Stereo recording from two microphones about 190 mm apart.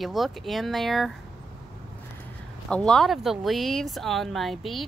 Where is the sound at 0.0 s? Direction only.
Centre (ahead or behind).